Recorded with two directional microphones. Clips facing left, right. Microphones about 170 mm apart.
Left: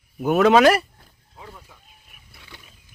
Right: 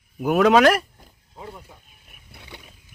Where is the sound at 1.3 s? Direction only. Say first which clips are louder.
Right 4 dB; 25° right (ahead or behind).